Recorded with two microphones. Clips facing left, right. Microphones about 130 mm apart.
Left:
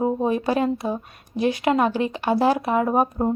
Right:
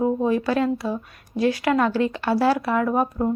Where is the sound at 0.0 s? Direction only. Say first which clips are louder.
Right 1 dB; 20° left (ahead or behind).